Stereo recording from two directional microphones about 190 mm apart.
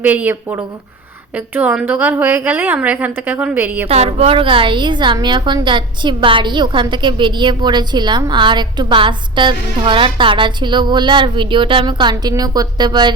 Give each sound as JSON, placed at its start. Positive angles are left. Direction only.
{"t": 0.0, "sound": "a woman's voice", "side_deg": -10}
{"t": 3.8, "sound": "a woman's voice", "side_deg": -35}